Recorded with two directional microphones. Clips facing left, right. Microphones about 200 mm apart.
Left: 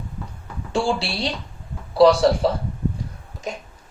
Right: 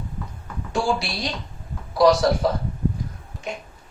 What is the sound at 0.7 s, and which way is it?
A man's voice, 30° left (ahead or behind).